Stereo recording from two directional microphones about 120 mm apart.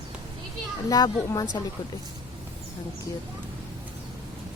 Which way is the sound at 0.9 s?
30° left (ahead or behind).